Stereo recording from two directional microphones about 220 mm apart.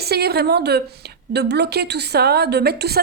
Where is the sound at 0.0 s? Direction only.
45° right (ahead or behind).